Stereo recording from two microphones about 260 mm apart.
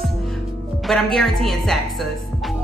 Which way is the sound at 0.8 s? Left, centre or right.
Centre.